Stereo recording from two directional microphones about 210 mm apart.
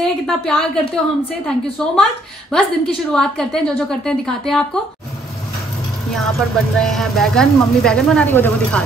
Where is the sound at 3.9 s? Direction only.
5° left (ahead or behind).